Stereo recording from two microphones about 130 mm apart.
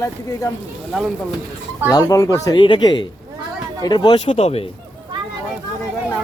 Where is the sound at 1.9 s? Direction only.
30° left (ahead or behind).